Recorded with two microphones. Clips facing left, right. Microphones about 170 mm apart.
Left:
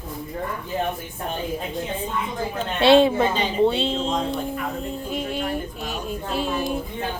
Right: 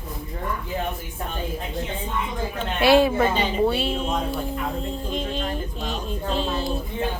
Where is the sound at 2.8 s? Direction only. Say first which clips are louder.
Left 2 dB; 25° left (ahead or behind).